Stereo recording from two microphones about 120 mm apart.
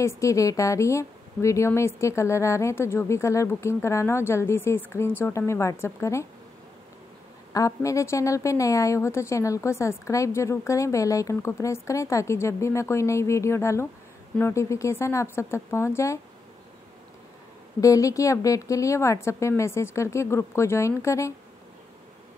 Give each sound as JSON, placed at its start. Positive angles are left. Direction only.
{"t": 0.0, "sound": "a woman's voice", "side_deg": 25}
{"t": 7.5, "sound": "a woman's voice", "side_deg": 25}
{"t": 17.7, "sound": "a woman's voice", "side_deg": 30}